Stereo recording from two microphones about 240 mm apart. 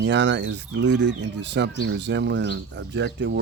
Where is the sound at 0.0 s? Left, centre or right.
Right.